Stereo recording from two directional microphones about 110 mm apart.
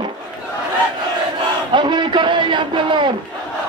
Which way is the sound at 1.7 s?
45° right (ahead or behind).